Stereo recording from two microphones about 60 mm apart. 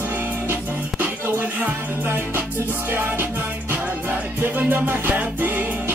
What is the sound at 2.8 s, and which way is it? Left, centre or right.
Music, right.